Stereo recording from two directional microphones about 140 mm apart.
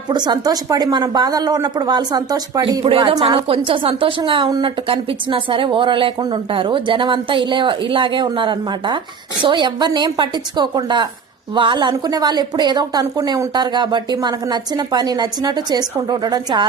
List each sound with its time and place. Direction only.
0.1 s speech: 30° right (ahead or behind)
2.8 s a woman's voice: 40° right (ahead or behind)